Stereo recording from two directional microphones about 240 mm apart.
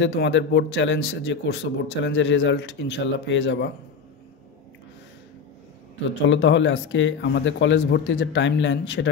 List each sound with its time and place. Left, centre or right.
0.0 s a man's voice: left
6.0 s a man's voice: left